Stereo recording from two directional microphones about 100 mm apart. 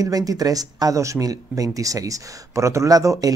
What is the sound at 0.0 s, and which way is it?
Speech, 35° right (ahead or behind).